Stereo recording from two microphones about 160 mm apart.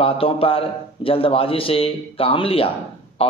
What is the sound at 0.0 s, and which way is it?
A man's voice, 35° left (ahead or behind).